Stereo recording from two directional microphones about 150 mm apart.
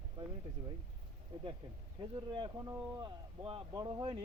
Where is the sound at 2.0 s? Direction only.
30° right (ahead or behind).